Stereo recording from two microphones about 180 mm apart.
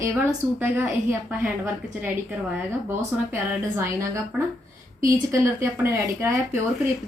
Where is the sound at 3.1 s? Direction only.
5° right (ahead or behind).